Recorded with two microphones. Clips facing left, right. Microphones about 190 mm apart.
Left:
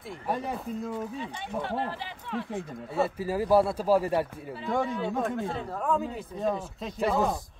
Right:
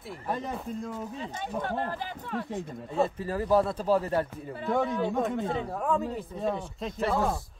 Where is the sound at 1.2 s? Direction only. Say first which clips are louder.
Right 1 dB; 45° right (ahead or behind).